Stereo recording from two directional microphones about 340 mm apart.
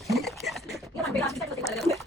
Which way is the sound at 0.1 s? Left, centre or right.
Centre.